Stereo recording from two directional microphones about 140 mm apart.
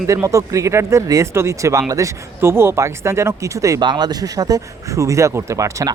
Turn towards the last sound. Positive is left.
turn(degrees=-25)  # may be behind; listen again after turning